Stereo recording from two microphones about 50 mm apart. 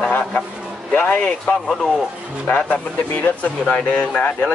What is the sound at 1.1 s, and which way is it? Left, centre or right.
Speech, left.